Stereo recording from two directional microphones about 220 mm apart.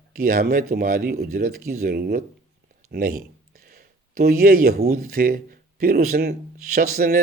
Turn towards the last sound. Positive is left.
turn(degrees=-40)  # may be behind; listen again after turning